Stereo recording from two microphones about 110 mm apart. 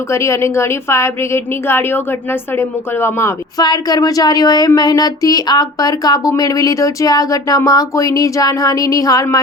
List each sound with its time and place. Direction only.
0.1 s speech: 25° left (ahead or behind)
3.6 s speech: 40° left (ahead or behind)